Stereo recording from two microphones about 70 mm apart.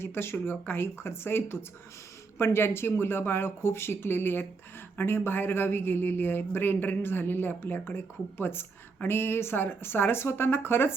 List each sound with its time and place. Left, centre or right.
0.0 s speech: left